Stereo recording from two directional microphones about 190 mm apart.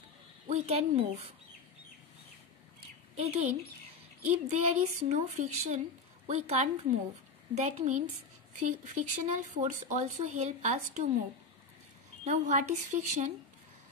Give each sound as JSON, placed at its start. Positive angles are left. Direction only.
{"t": 0.5, "sound": "speech", "side_deg": -35}
{"t": 3.2, "sound": "speech", "side_deg": -35}
{"t": 12.3, "sound": "speech", "side_deg": -40}